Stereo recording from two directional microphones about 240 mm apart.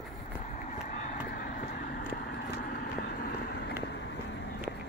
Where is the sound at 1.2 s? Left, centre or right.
Left.